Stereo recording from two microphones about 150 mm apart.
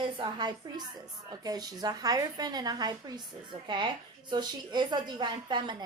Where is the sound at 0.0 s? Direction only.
30° right (ahead or behind).